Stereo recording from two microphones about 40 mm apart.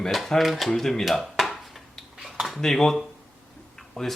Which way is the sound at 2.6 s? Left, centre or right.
Centre.